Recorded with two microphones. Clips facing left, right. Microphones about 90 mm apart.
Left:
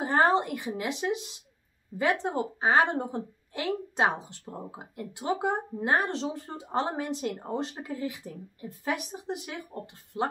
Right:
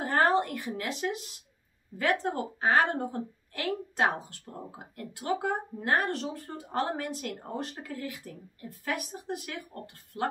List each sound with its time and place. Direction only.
0.0 s speech: 20° left (ahead or behind)